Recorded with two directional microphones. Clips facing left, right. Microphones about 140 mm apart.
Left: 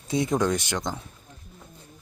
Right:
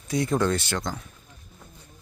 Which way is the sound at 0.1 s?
20° left (ahead or behind).